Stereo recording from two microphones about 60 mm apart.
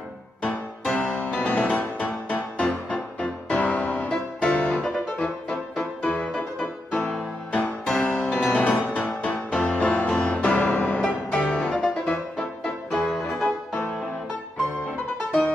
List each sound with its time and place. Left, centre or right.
0.9 s music: left
5.2 s music: centre